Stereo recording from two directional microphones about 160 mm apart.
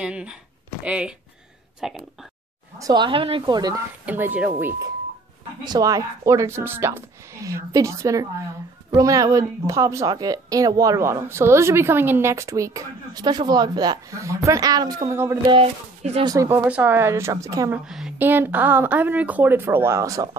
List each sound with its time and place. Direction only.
0.0 s a woman's voice: 5° right (ahead or behind)
2.8 s a woman's voice: 30° right (ahead or behind)
4.0 s a woman's voice: 10° right (ahead or behind)
5.6 s a woman's voice: 25° right (ahead or behind)
15.4 s speech: 35° right (ahead or behind)
16.3 s a woman's voice: 15° right (ahead or behind)
17.8 s a woman's voice: 5° right (ahead or behind); by 20.2 s 20° right (ahead or behind)